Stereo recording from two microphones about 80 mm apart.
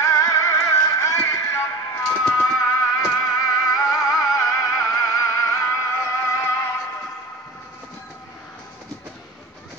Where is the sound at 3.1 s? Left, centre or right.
Left.